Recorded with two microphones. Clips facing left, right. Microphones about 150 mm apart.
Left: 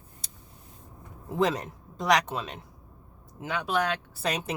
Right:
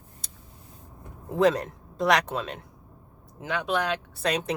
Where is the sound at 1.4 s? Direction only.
Centre (ahead or behind).